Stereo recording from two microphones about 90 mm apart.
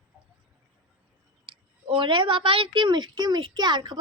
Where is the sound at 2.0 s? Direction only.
65° right (ahead or behind).